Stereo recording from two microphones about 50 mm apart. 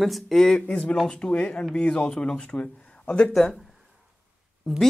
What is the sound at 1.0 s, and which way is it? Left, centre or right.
Speech, centre.